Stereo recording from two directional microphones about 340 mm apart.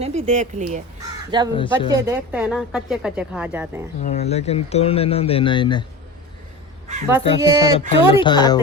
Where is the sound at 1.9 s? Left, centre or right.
Centre.